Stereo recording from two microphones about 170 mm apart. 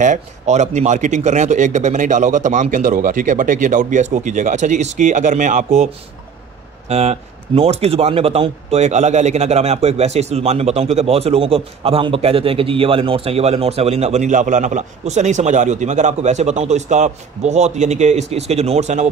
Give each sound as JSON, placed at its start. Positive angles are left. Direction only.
{"t": 0.0, "sound": "speech", "side_deg": -45}